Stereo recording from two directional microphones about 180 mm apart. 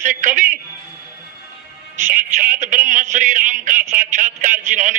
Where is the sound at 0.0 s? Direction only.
45° right (ahead or behind).